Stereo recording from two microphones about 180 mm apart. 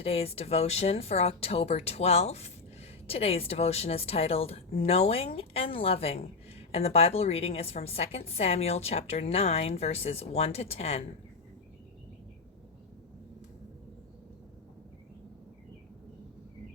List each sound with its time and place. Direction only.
0.0 s speech: 35° left (ahead or behind)